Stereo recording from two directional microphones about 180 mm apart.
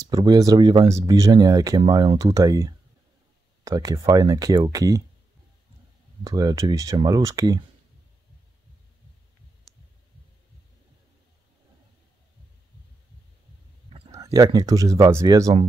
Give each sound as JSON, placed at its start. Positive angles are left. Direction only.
{"t": 0.1, "sound": "speech", "side_deg": -20}
{"t": 6.2, "sound": "speech", "side_deg": -20}
{"t": 14.1, "sound": "speech", "side_deg": -20}